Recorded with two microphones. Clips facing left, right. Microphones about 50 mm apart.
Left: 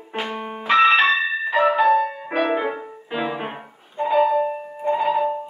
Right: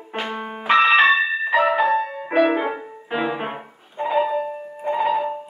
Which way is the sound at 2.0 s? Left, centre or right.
Centre.